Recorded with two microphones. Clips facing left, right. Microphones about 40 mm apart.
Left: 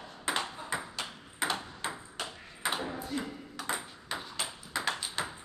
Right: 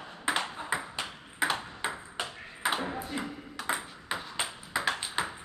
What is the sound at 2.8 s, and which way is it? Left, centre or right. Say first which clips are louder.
Ping: right 1 dB; right.